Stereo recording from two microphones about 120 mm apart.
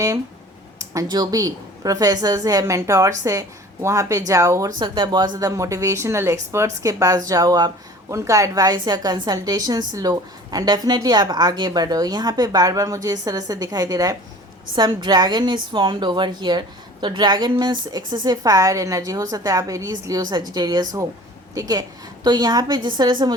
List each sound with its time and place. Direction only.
1.0 s a woman's voice: 35° right (ahead or behind)
4.8 s a woman's voice: 40° right (ahead or behind)